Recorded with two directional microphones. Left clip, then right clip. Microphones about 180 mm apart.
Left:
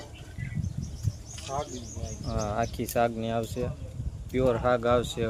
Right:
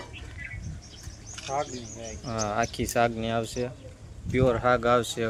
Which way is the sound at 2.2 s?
5° left (ahead or behind).